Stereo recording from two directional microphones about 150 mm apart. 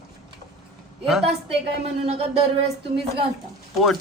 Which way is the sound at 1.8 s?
45° right (ahead or behind).